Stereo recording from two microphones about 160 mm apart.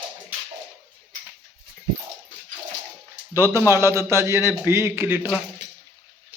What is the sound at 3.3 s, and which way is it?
Speech, 15° right (ahead or behind).